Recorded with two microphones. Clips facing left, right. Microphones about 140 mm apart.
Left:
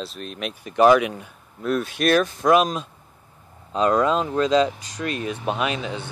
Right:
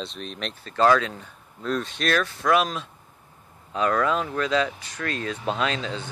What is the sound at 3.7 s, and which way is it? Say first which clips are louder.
Speech: left 4 dB; 25° left (ahead or behind).